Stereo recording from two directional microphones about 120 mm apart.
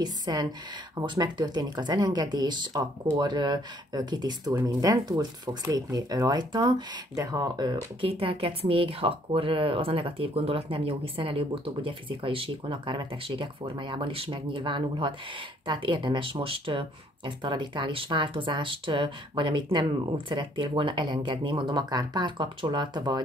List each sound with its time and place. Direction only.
0.0 s speech: 35° right (ahead or behind)